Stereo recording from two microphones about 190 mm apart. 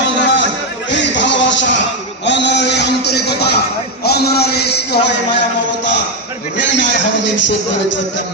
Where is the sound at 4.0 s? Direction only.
55° left (ahead or behind).